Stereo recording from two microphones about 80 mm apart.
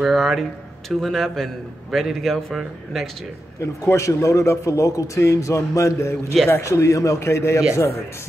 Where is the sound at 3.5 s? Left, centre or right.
Left.